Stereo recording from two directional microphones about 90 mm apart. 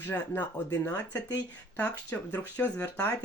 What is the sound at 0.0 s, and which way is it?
Speech, 20° left (ahead or behind).